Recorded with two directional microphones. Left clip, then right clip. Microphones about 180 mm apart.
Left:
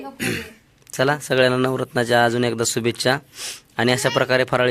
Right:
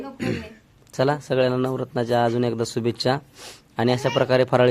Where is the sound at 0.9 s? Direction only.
Centre (ahead or behind).